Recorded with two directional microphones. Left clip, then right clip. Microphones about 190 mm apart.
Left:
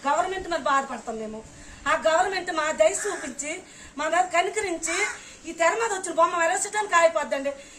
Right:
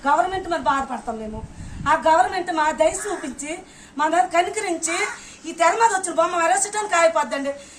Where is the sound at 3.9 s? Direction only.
Centre (ahead or behind).